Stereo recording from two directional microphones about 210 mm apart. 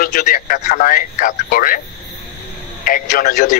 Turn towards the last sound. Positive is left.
turn(degrees=40)  # may be behind; listen again after turning